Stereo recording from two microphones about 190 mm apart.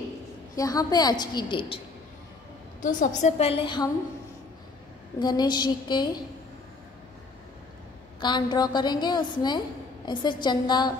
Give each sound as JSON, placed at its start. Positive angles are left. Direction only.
{"t": 0.6, "sound": "a woman's voice", "side_deg": 20}
{"t": 2.8, "sound": "a woman's voice", "side_deg": 45}
{"t": 5.2, "sound": "a woman's voice", "side_deg": 20}
{"t": 8.2, "sound": "a woman's voice", "side_deg": 25}